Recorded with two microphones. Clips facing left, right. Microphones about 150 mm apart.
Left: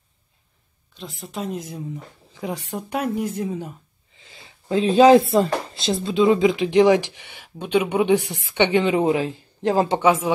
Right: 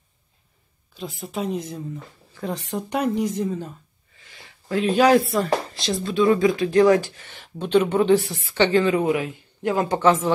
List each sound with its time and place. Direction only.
0.9 s speech: centre (ahead or behind)
2.3 s a woman's voice: 10° left (ahead or behind)
4.2 s a woman's voice: 25° left (ahead or behind)
9.9 s a woman's voice: 10° left (ahead or behind)